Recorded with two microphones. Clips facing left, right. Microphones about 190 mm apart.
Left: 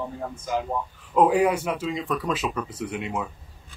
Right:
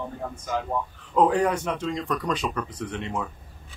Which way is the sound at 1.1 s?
10° left (ahead or behind).